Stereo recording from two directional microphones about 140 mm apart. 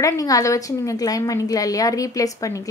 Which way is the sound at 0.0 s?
25° left (ahead or behind).